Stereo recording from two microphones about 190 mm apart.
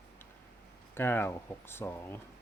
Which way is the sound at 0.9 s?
10° left (ahead or behind).